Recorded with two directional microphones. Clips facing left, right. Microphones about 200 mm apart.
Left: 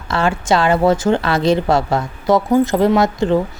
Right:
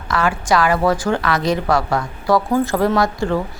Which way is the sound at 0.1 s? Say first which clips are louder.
Left 2 dB; 25° left (ahead or behind).